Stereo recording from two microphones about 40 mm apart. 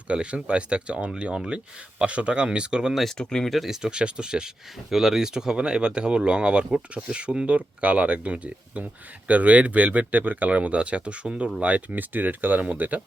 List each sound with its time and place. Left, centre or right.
0.1 s speech: right
2.9 s speech: centre
3.2 s speech: centre
3.5 s speech: centre
3.8 s speech: right
4.9 s speech: centre; by 11.9 s right
11.9 s speech: right